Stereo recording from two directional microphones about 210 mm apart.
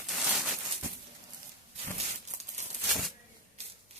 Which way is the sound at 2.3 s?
35° right (ahead or behind).